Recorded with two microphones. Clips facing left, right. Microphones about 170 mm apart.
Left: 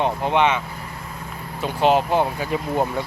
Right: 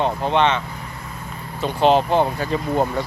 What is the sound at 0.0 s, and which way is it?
Speech, 15° left (ahead or behind).